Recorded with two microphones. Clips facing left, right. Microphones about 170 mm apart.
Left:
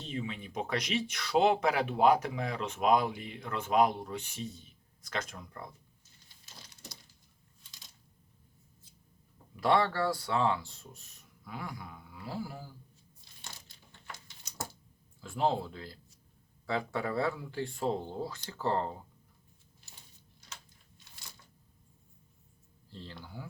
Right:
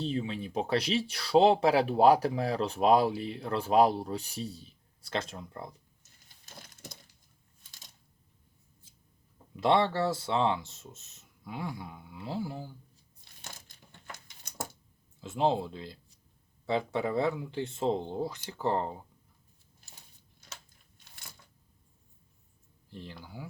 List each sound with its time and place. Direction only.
0.0 s speech: 30° right (ahead or behind)
6.4 s a sound: 50° right (ahead or behind)
9.6 s speech: 25° right (ahead or behind)
14.5 s a sound: 55° right (ahead or behind)
15.2 s speech: 20° right (ahead or behind)
22.9 s speech: 15° right (ahead or behind)